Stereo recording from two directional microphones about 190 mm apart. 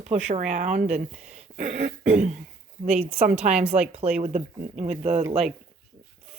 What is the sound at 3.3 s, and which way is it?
Speech, 35° right (ahead or behind).